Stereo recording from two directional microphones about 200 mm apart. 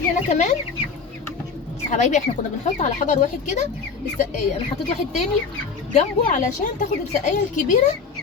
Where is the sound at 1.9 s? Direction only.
40° left (ahead or behind).